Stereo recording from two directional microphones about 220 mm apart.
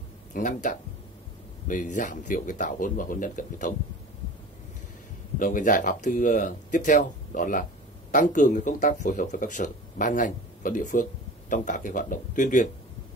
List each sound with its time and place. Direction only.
0.3 s speech: 35° left (ahead or behind)
5.4 s speech: 40° left (ahead or behind)